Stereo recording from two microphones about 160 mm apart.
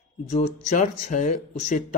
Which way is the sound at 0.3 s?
50° left (ahead or behind).